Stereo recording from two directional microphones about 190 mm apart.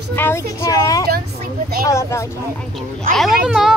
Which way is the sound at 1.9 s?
15° left (ahead or behind).